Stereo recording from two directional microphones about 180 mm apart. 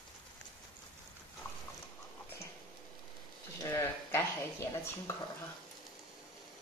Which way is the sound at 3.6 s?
15° left (ahead or behind).